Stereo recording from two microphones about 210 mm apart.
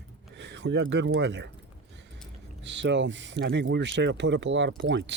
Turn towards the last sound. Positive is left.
turn(degrees=-60)  # may be behind; listen again after turning